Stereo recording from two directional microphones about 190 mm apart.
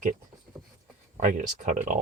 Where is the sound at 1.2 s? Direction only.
40° right (ahead or behind).